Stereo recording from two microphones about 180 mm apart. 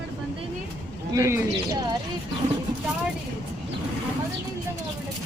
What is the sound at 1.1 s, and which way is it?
Music, 15° right (ahead or behind).